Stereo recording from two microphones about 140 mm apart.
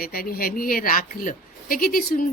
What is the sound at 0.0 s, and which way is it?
Speech, 90° left.